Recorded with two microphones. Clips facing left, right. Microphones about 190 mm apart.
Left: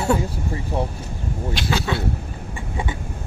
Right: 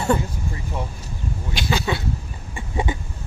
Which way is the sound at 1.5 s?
Centre (ahead or behind).